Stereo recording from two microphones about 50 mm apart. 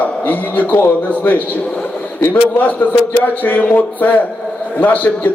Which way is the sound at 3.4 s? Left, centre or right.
Left.